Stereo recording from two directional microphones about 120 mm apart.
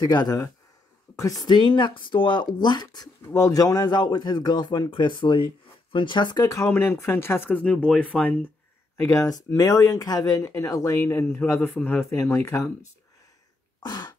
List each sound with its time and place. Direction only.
0.0 s a man's voice: 35° left (ahead or behind)
3.3 s a man's voice: 25° left (ahead or behind)
8.9 s speech: 25° left (ahead or behind)
13.8 s throat clearing: 35° left (ahead or behind)